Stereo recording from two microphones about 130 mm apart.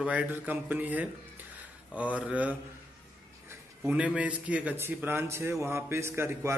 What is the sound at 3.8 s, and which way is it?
Speech, 10° right (ahead or behind).